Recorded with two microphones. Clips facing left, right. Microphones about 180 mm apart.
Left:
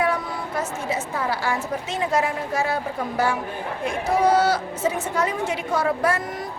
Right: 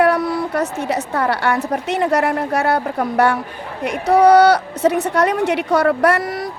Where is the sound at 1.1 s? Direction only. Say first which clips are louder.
Right 8 dB; 70° right (ahead or behind).